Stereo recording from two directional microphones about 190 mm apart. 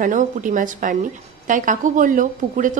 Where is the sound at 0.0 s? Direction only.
45° right (ahead or behind).